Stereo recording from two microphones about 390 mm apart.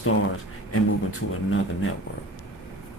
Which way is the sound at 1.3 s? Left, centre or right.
Left.